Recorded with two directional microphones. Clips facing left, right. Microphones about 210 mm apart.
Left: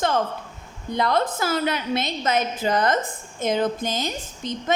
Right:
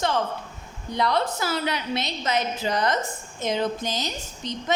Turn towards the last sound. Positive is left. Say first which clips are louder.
# left 2 dB
turn(degrees=50)  # may be behind; listen again after turning